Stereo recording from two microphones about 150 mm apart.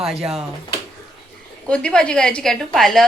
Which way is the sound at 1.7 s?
5° left (ahead or behind).